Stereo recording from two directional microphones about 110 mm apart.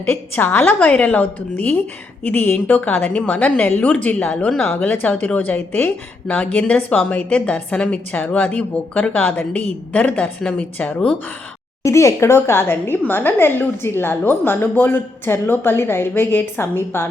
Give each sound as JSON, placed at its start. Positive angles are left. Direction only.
{"t": 0.0, "sound": "a woman's voice", "side_deg": 20}
{"t": 11.8, "sound": "a woman's voice", "side_deg": 25}